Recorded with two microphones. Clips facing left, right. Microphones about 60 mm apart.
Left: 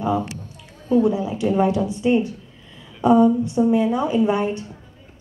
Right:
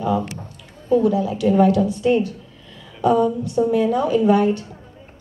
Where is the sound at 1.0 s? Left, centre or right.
Left.